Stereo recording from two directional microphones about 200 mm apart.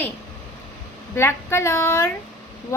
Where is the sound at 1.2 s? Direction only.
10° left (ahead or behind).